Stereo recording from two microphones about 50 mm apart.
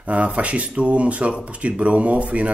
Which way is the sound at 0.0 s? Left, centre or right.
Right.